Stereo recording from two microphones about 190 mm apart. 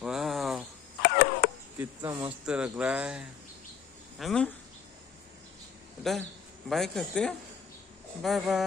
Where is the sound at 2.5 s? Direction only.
5° right (ahead or behind).